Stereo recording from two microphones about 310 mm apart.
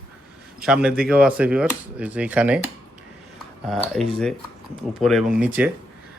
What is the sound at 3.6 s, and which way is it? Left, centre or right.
Speech, centre.